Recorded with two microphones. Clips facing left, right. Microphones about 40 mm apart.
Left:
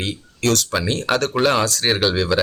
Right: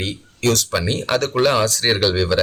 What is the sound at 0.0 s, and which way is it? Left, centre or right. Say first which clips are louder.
Speech: right 1 dB; centre.